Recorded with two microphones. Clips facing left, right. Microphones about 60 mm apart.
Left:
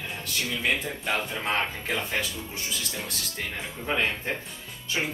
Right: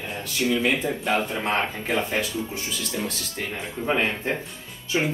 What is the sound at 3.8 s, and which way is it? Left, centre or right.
Speech, centre.